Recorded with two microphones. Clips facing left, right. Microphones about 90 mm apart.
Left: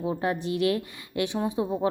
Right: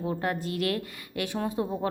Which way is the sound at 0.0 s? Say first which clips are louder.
Left 2 dB; 20° left (ahead or behind).